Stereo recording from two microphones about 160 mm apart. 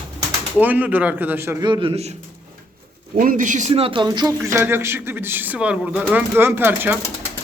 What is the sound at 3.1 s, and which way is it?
A man's voice, 55° right (ahead or behind).